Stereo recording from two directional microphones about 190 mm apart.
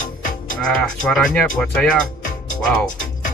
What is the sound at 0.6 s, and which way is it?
Speech, 5° left (ahead or behind).